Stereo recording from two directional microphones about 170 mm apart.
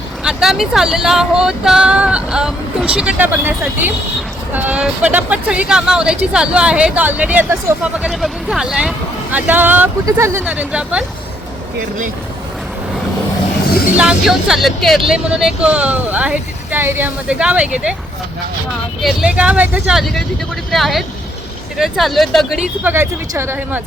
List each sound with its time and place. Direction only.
0.3 s speech: 5° right (ahead or behind)
13.9 s speech: 5° right (ahead or behind)
19.0 s speech: 5° right (ahead or behind)